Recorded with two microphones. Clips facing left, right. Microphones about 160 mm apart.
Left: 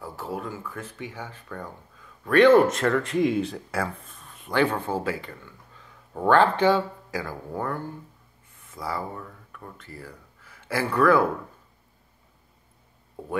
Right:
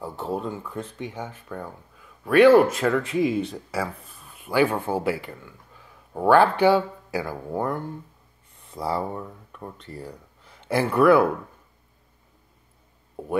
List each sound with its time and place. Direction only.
0.0 s speech: 25° right (ahead or behind)
8.6 s speech: 25° right (ahead or behind)